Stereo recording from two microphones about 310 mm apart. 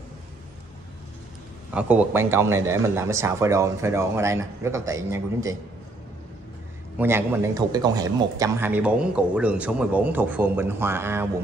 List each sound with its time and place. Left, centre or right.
1.7 s a man's voice: centre
7.0 s a man's voice: centre